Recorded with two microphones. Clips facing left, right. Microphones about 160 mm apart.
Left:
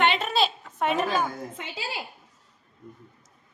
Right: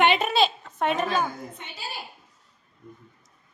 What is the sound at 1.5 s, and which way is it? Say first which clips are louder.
Speech: left 3 dB; 90° left.